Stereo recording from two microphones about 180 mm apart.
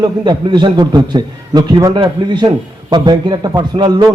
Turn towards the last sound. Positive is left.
turn(degrees=-25)  # may be behind; listen again after turning